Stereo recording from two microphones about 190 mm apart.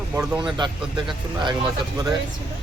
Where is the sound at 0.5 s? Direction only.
25° right (ahead or behind).